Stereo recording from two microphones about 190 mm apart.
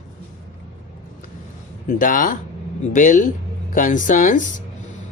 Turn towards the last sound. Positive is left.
turn(degrees=45)  # may be behind; listen again after turning